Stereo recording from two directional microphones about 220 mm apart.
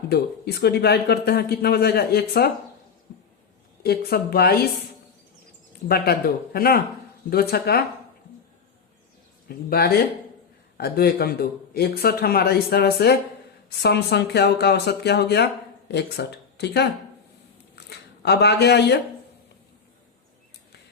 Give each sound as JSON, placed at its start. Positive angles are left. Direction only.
{"t": 0.1, "sound": "speech", "side_deg": 45}
{"t": 3.8, "sound": "speech", "side_deg": 45}
{"t": 5.9, "sound": "speech", "side_deg": 45}
{"t": 9.5, "sound": "speech", "side_deg": 45}
{"t": 17.7, "sound": "a sound", "side_deg": 50}